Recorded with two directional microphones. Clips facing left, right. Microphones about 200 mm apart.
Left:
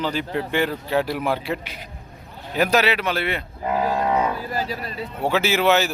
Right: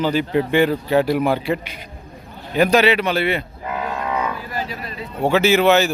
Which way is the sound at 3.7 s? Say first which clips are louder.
Left 3 dB; 35° left (ahead or behind).